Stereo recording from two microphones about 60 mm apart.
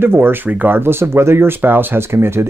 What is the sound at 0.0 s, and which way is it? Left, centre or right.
Speech, right.